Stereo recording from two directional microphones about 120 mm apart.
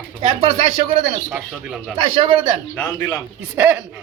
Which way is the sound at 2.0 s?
45° right (ahead or behind).